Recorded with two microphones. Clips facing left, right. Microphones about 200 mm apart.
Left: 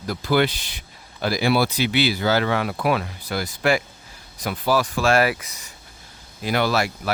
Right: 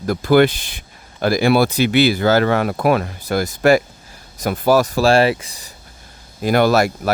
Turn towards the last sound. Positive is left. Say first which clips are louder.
# right 7 dB
turn(degrees=-45)  # may be behind; listen again after turning